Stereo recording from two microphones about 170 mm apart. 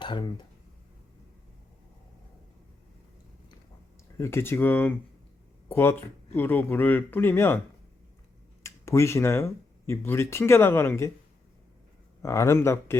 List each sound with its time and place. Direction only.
0.0 s speech: 25° left (ahead or behind)
4.2 s speech: 15° left (ahead or behind)
8.6 s speech: 15° left (ahead or behind)
12.2 s speech: 20° left (ahead or behind)